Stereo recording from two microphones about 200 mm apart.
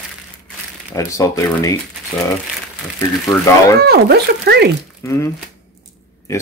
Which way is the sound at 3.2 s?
15° left (ahead or behind).